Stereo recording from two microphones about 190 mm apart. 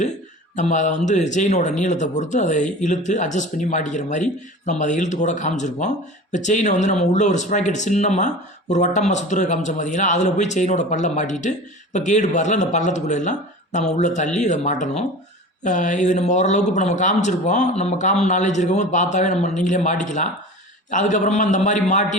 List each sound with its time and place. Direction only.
0.5 s speech: 40° left (ahead or behind)